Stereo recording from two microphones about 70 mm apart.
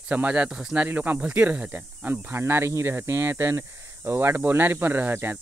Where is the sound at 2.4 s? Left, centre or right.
Right.